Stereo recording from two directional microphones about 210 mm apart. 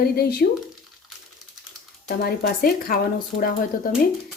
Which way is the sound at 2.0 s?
45° left (ahead or behind).